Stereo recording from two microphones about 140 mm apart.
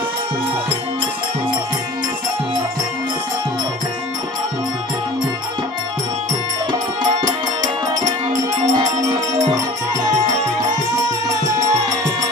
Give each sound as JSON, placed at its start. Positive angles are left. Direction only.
{"t": 7.2, "sound": "music", "side_deg": -25}
{"t": 11.3, "sound": "music", "side_deg": -25}